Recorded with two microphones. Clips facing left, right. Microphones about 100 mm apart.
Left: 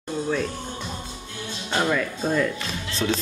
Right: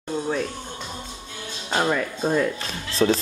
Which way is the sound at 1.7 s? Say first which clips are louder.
Right 1 dB; 20° right (ahead or behind).